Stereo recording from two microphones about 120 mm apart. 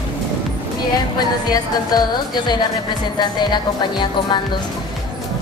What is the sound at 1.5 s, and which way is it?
A woman's voice, 35° left (ahead or behind).